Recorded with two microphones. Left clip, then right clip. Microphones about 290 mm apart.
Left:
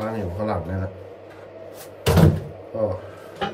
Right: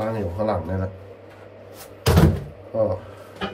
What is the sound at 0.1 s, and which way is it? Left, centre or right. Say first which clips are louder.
Speech: right 2 dB; centre.